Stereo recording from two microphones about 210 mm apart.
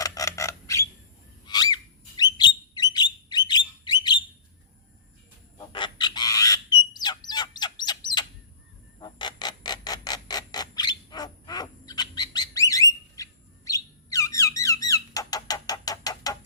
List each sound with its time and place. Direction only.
0.0 s squawk: 15° left (ahead or behind)
1.5 s bird: 20° left (ahead or behind)
5.5 s bird: 20° left (ahead or behind)
9.0 s a sound: 20° left (ahead or behind)
13.2 s bird: 15° left (ahead or behind)
13.7 s squeak: 15° left (ahead or behind)